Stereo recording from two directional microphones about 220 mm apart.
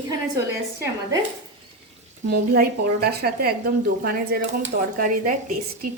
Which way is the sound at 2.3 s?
45° right (ahead or behind).